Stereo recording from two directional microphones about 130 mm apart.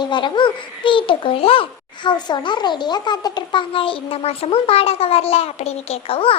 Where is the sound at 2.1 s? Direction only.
35° left (ahead or behind).